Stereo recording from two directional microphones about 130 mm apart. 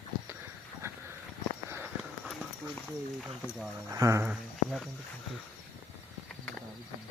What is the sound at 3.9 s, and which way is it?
Cricket, 25° right (ahead or behind).